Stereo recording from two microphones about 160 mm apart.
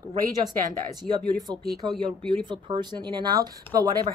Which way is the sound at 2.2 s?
30° right (ahead or behind).